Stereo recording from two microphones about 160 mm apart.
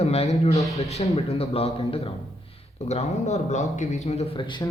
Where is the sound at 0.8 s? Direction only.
40° left (ahead or behind).